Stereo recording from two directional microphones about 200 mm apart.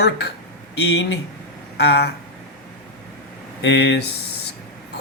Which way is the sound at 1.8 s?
55° left (ahead or behind).